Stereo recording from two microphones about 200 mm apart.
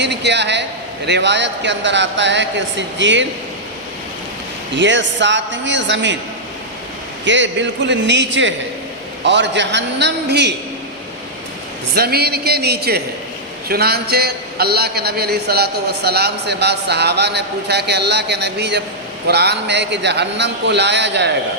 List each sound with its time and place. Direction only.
0.0 s speech: 60° right (ahead or behind)
4.7 s speech: 65° right (ahead or behind)
7.3 s speech: 65° right (ahead or behind)
11.9 s a man's voice: 50° right (ahead or behind)